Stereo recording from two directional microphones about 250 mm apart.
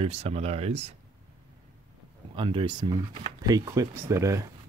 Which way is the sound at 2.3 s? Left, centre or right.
Centre.